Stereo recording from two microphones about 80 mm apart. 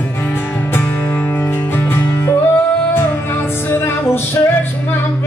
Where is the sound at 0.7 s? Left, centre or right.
Left.